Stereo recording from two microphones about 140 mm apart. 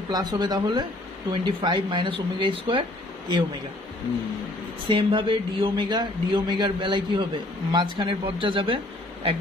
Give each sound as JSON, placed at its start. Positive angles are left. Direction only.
{"t": 0.1, "sound": "a man's voice", "side_deg": -30}
{"t": 4.8, "sound": "a man's voice", "side_deg": -40}